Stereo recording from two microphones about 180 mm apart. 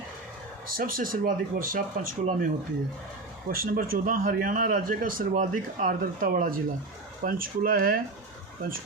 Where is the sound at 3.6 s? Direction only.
55° right (ahead or behind).